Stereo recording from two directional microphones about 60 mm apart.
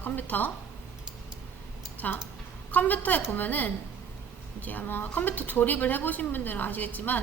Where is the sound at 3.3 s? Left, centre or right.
Left.